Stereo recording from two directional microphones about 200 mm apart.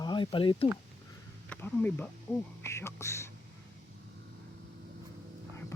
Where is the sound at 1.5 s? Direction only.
10° left (ahead or behind).